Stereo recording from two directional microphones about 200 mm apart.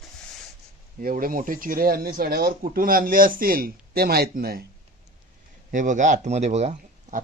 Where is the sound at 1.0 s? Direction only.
45° right (ahead or behind).